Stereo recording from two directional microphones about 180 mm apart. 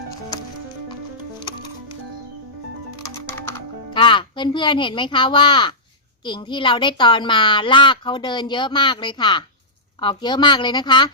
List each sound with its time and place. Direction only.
3.0 s music: 15° left (ahead or behind)
3.9 s a child's voice: 25° left (ahead or behind)